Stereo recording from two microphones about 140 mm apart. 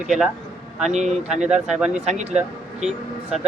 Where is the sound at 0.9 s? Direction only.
55° right (ahead or behind).